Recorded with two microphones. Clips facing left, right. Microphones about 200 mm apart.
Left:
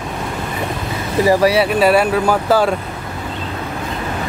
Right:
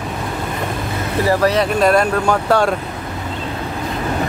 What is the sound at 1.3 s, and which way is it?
Speech, 10° left (ahead or behind).